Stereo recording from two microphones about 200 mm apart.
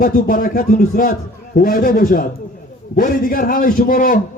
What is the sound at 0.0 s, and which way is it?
A man's voice, 45° left (ahead or behind).